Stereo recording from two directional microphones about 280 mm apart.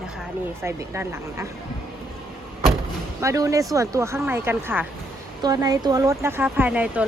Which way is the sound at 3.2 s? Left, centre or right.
Centre.